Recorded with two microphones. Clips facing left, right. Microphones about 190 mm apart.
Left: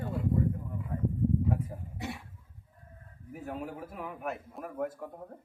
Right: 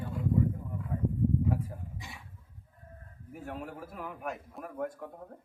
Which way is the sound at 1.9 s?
65° left (ahead or behind).